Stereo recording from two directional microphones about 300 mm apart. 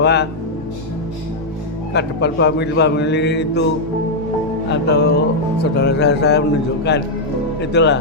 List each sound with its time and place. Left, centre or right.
0.0 s speech: left
1.9 s speech: left
4.7 s speech: left